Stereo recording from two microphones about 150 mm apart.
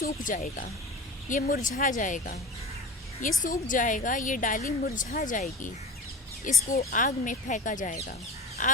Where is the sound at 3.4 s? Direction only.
60° left (ahead or behind).